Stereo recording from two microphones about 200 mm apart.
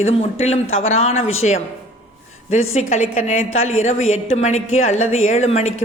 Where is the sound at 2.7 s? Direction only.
35° left (ahead or behind).